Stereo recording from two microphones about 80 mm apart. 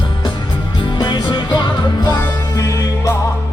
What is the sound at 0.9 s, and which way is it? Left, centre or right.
Music, left.